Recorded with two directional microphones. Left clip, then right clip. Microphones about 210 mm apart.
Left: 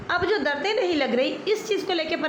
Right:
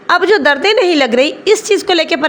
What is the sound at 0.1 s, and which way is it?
A woman's voice, 50° right (ahead or behind).